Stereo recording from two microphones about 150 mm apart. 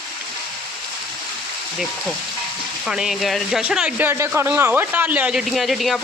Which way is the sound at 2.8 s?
5° right (ahead or behind).